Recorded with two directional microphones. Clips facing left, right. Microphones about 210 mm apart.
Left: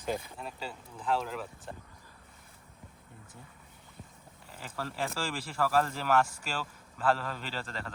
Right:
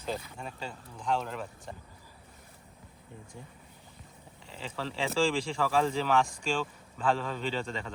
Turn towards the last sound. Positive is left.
turn(degrees=0)  # may be behind; listen again after turning